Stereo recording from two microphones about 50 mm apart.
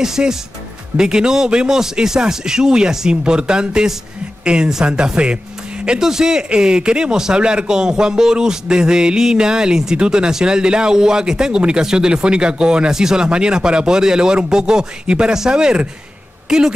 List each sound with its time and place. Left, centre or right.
0.0 s speech: centre